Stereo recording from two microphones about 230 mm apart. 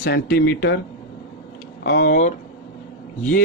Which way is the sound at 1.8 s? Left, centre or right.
Left.